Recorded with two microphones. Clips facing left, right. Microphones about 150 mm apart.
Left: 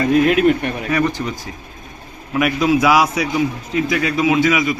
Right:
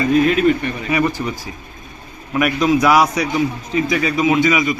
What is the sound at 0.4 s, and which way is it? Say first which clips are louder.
Speech: left 1 dB; 55° left (ahead or behind).